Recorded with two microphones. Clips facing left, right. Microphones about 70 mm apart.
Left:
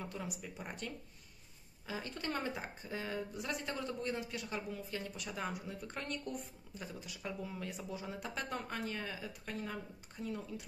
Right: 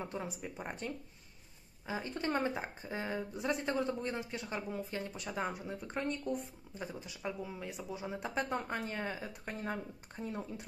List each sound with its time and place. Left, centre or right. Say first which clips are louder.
0.0 s speech: right 3 dB; right
8.2 s speech: right 8 dB; right